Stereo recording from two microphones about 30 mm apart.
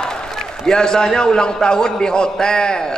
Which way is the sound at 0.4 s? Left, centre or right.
Left.